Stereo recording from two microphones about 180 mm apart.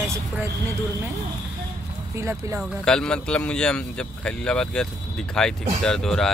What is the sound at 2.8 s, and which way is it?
A man's voice, 5° left (ahead or behind).